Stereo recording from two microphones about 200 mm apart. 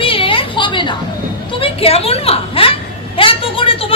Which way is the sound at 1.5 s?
30° left (ahead or behind).